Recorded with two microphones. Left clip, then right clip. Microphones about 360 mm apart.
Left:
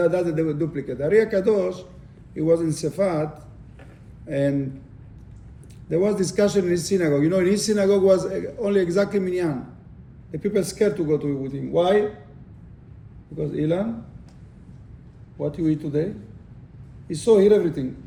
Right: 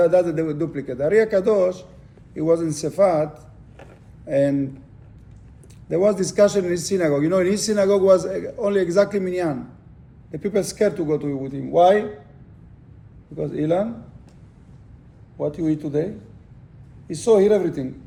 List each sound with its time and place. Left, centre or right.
0.0 s a man's voice: centre
5.9 s a man's voice: centre
13.3 s a man's voice: centre
15.4 s a man's voice: centre